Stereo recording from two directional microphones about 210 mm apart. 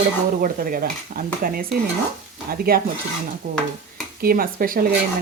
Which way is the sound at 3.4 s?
40° right (ahead or behind).